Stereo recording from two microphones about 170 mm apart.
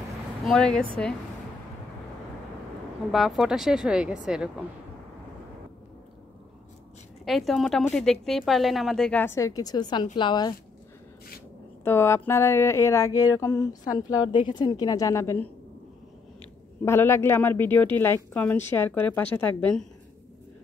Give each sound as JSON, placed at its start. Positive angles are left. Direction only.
{"t": 0.5, "sound": "a woman's voice", "side_deg": 5}
{"t": 3.1, "sound": "a woman's voice", "side_deg": 0}
{"t": 7.2, "sound": "a woman's voice", "side_deg": 0}
{"t": 11.8, "sound": "a woman's voice", "side_deg": 15}
{"t": 16.8, "sound": "speech", "side_deg": 15}